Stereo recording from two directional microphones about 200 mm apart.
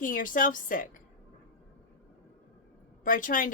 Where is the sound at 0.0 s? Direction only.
40° left (ahead or behind).